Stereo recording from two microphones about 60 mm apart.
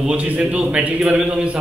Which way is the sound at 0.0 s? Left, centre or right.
Centre.